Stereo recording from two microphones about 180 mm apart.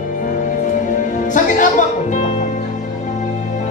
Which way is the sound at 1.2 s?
45° left (ahead or behind).